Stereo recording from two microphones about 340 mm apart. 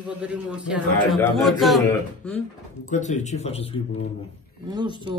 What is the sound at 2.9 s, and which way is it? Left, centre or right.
Speech, left.